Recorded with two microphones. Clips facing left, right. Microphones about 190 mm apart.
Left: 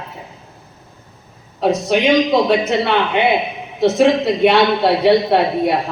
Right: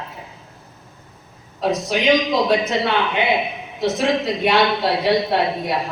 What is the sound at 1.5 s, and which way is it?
A man's voice, 60° left (ahead or behind).